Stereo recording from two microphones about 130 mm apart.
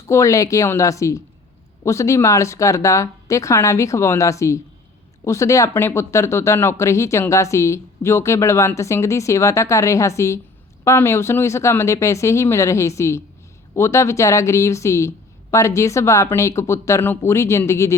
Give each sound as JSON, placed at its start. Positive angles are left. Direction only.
{"t": 0.1, "sound": "speech", "side_deg": 25}